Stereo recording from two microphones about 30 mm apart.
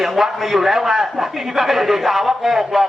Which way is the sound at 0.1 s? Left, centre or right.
Centre.